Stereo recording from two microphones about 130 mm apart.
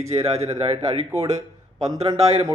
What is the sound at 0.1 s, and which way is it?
A man's voice, 55° right (ahead or behind).